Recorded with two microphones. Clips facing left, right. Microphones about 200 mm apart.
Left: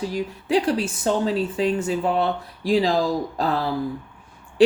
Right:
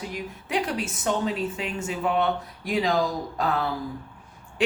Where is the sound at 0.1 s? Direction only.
30° left (ahead or behind).